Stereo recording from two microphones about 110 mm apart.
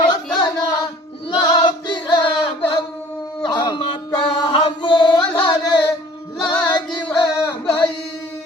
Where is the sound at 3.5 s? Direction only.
40° left (ahead or behind).